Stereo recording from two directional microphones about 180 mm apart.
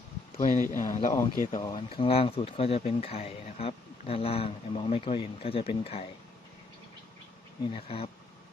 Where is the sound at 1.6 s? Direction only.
20° left (ahead or behind).